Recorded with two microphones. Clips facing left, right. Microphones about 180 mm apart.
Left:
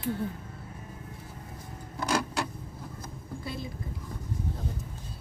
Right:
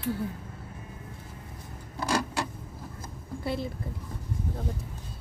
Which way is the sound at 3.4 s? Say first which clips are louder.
Right 7 dB; 60° right (ahead or behind).